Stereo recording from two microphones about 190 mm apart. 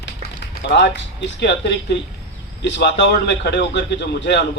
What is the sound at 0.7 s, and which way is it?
A man's voice, 65° left (ahead or behind).